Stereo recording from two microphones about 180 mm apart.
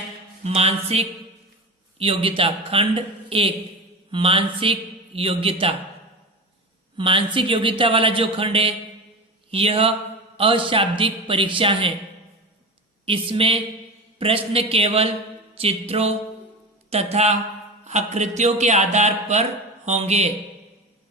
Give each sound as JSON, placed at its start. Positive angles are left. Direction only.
{"t": 0.4, "sound": "a man's voice", "side_deg": -35}
{"t": 6.9, "sound": "a man's voice", "side_deg": -30}
{"t": 13.1, "sound": "a man's voice", "side_deg": -30}